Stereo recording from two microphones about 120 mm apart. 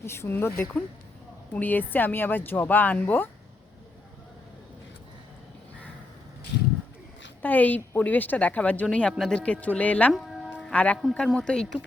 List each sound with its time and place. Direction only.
0.0 s speech: 20° left (ahead or behind)
7.4 s speech: 15° left (ahead or behind)
10.1 s music: centre (ahead or behind)
10.7 s speech: 10° left (ahead or behind)